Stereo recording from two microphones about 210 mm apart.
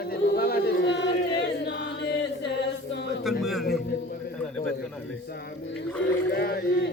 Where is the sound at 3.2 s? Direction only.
Centre (ahead or behind).